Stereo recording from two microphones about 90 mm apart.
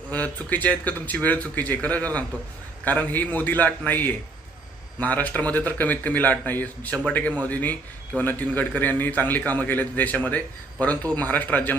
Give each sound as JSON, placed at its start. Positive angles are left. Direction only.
{"t": 0.1, "sound": "a man's voice", "side_deg": 15}